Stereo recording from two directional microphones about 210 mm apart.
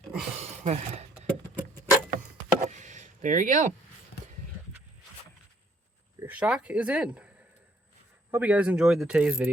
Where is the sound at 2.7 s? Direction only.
35° right (ahead or behind).